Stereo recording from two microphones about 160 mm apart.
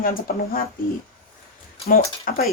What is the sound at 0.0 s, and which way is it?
Speech, 65° left (ahead or behind).